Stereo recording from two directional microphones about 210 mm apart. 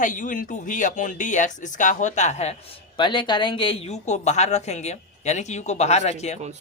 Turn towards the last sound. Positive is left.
turn(degrees=30)  # may be behind; listen again after turning